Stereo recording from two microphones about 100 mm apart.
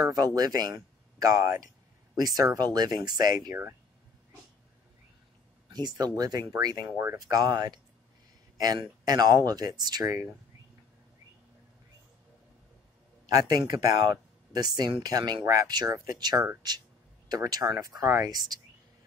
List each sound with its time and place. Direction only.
0.0 s speech: 40° right (ahead or behind)
5.7 s speech: 45° right (ahead or behind)
6.9 s speech: 25° right (ahead or behind)
7.2 s speech: 40° right (ahead or behind)
13.3 s speech: 40° right (ahead or behind)
18.0 s speech: 25° right (ahead or behind)
18.3 s speech: 40° right (ahead or behind)